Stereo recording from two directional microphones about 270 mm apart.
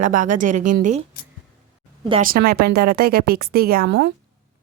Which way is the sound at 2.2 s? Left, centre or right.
Right.